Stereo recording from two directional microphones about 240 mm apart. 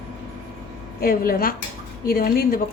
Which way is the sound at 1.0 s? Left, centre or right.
Left.